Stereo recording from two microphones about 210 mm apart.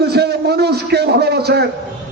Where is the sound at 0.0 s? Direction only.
50° right (ahead or behind).